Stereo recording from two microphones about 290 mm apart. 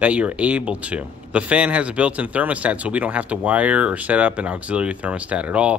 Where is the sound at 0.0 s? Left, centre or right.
Centre.